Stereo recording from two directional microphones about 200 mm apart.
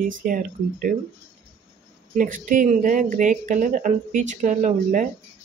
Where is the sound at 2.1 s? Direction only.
40° right (ahead or behind).